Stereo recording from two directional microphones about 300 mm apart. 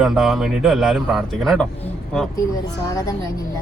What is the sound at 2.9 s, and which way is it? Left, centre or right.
Speech, centre.